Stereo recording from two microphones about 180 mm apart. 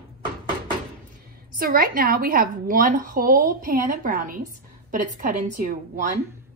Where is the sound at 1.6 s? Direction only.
50° right (ahead or behind).